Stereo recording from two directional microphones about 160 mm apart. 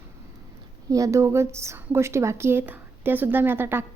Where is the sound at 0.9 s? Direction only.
20° right (ahead or behind).